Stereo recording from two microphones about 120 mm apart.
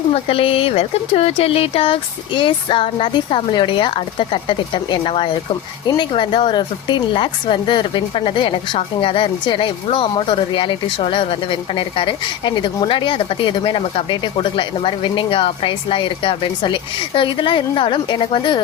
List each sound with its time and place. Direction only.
0.1 s a woman's voice: 50° left (ahead or behind)